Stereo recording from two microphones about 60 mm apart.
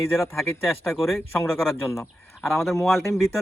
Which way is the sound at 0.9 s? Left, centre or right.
Centre.